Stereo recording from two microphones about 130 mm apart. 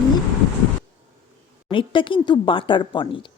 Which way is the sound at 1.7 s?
40° left (ahead or behind).